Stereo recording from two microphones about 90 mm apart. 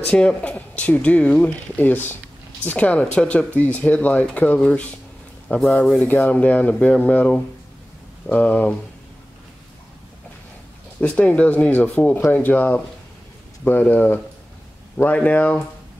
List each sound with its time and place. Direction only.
0.0 s speech: 10° left (ahead or behind)
6.2 s speech: 15° left (ahead or behind)
11.0 s speech: 15° left (ahead or behind)